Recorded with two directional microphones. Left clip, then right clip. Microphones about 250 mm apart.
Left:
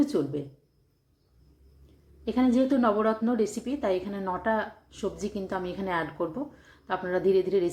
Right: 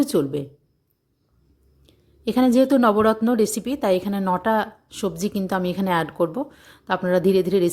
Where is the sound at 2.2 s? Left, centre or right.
Right.